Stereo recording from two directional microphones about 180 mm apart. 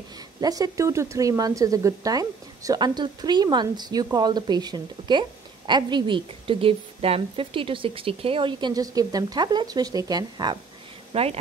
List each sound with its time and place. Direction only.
0.4 s a woman's voice: 20° right (ahead or behind)